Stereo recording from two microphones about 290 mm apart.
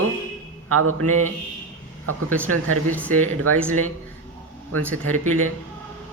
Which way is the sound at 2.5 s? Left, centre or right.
Right.